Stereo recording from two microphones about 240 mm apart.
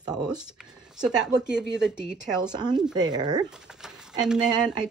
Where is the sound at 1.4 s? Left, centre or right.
Centre.